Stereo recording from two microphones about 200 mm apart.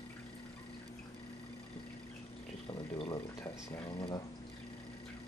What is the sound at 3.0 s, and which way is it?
Speech, 25° left (ahead or behind).